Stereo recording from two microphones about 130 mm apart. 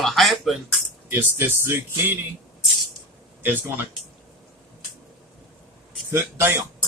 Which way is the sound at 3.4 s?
15° right (ahead or behind).